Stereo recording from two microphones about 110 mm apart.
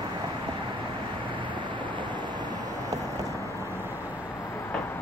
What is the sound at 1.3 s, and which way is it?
Vehicle, 45° right (ahead or behind).